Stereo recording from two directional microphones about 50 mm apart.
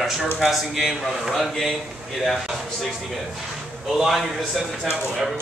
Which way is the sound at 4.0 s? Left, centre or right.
Centre.